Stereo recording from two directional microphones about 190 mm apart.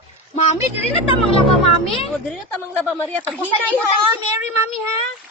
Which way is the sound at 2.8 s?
10° left (ahead or behind).